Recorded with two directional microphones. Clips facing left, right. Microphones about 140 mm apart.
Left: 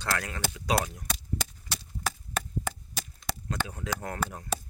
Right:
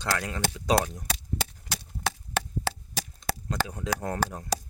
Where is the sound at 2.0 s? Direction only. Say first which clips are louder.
Right 3 dB; 90° right.